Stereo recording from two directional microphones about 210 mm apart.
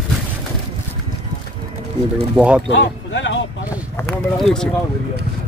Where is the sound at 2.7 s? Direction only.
60° left (ahead or behind).